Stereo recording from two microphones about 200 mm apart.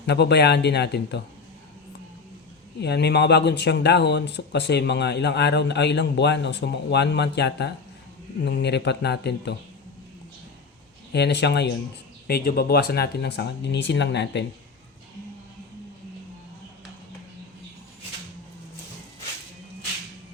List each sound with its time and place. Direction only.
0.0 s speech: 55° left (ahead or behind)
2.8 s speech: 55° left (ahead or behind)
11.1 s speech: 60° left (ahead or behind)